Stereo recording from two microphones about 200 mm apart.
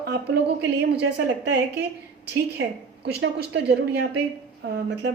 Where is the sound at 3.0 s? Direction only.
55° right (ahead or behind).